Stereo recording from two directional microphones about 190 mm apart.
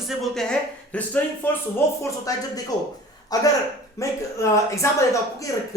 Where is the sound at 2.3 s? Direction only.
20° left (ahead or behind).